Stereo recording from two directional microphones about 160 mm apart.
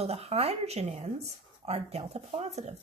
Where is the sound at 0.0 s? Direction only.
40° right (ahead or behind).